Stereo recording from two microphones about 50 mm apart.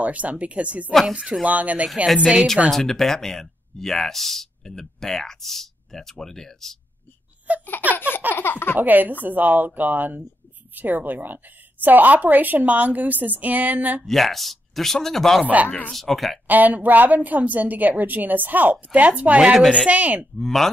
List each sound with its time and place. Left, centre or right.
0.0 s a woman's voice: right
2.7 s speech: centre
7.5 s baby laughter: right
7.9 s baby laughter: left
8.3 s a sound: left
8.7 s a woman's voice: right
14.0 s speech: centre
16.4 s a woman's voice: right
20.3 s speech: centre